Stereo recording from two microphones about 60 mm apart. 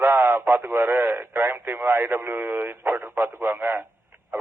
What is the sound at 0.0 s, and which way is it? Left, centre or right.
Speech, right.